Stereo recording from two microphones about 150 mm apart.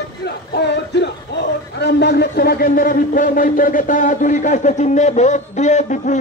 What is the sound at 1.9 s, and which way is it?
A man's voice, 90° left.